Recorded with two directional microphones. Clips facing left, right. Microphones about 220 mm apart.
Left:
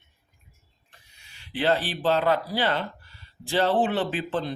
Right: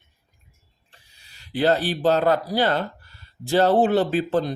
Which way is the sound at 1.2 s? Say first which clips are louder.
Right 5 dB; 40° right (ahead or behind).